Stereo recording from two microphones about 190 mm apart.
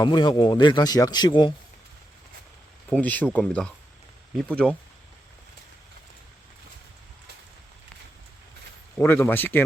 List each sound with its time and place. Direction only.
0.0 s speech: 20° left (ahead or behind)
3.0 s speech: 10° left (ahead or behind)
9.0 s speech: 10° left (ahead or behind)